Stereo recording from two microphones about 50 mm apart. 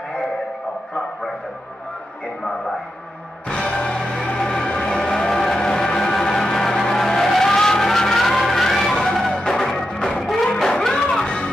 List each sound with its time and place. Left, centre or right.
3.4 s music: centre